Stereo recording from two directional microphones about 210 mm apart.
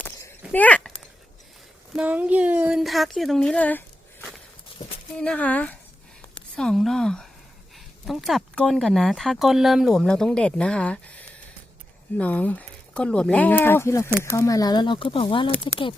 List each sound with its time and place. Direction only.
0.5 s speech: 5° left (ahead or behind)
1.9 s speech: 5° right (ahead or behind)
5.1 s speech: 5° left (ahead or behind); by 15.5 s 25° left (ahead or behind)